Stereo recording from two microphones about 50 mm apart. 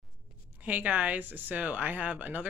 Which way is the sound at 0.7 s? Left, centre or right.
Right.